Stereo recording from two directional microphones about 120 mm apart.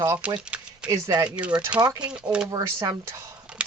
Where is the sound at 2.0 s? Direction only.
10° right (ahead or behind).